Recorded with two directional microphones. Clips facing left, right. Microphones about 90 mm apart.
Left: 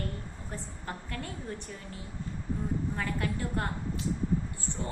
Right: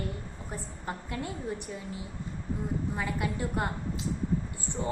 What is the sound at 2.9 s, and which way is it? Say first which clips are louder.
A woman's voice: right 1 dB; 15° right (ahead or behind).